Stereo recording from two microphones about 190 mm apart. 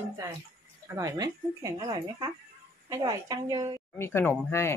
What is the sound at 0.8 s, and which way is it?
Speech, 15° right (ahead or behind).